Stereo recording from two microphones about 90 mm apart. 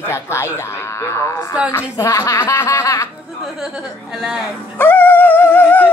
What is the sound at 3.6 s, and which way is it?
Speech, 5° right (ahead or behind).